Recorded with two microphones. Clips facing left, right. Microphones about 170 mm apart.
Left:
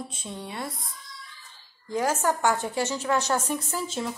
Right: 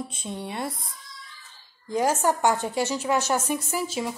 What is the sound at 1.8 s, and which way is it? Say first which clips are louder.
A woman's voice: right 2 dB; 20° right (ahead or behind).